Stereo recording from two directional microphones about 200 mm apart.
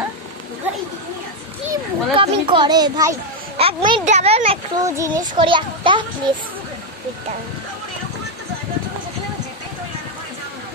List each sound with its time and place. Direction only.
1.7 s a child's voice: 25° right (ahead or behind)
4.7 s a child's voice: 15° right (ahead or behind)